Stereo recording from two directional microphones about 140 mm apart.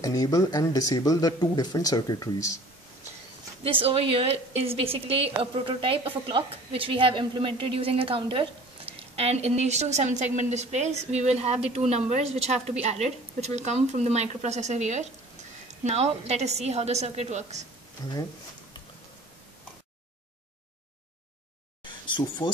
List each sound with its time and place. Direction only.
0.0 s speech: 25° left (ahead or behind)
3.6 s a woman's voice: 45° right (ahead or behind)
9.1 s a woman's voice: 50° right (ahead or behind)
18.0 s speech: 30° left (ahead or behind)
21.8 s a sound: 35° left (ahead or behind)